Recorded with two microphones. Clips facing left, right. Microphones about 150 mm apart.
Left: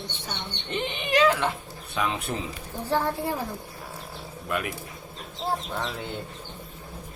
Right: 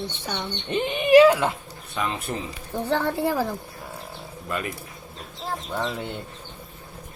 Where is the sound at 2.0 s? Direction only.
Centre (ahead or behind).